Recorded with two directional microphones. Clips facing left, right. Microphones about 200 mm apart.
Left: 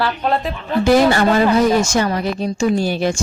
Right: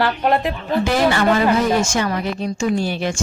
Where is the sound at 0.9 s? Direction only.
40° left (ahead or behind).